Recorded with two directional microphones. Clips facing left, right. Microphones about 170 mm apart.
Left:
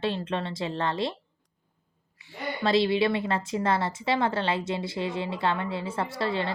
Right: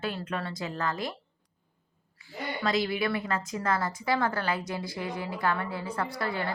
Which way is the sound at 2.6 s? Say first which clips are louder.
Left 5 dB; 30° left (ahead or behind).